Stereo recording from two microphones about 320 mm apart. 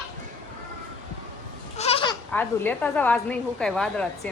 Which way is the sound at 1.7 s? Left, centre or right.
Centre.